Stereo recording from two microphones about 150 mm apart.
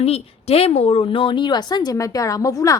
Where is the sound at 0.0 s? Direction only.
40° left (ahead or behind).